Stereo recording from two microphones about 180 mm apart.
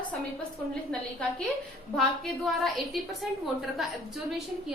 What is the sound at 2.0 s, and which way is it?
A woman's voice, centre (ahead or behind).